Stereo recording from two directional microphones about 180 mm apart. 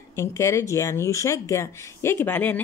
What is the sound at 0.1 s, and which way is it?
Speech, 15° left (ahead or behind).